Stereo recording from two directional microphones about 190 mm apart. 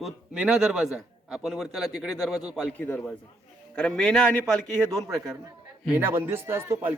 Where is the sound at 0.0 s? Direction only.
5° right (ahead or behind).